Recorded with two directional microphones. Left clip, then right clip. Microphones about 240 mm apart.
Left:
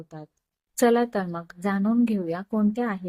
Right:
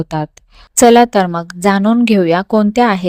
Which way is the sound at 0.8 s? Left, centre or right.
Right.